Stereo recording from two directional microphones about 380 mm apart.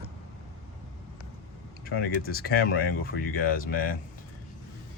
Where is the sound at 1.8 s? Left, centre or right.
Left.